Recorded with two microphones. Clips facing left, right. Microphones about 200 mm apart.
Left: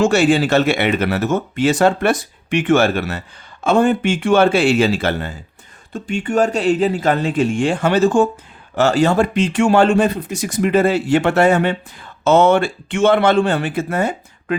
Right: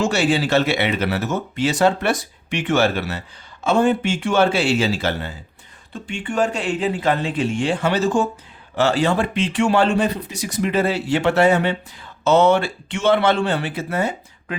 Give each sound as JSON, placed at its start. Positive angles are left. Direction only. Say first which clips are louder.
{"t": 0.0, "sound": "speech", "louder": "left 5 dB", "side_deg": 50}
{"t": 5.9, "sound": "speech", "louder": "left 6 dB", "side_deg": 40}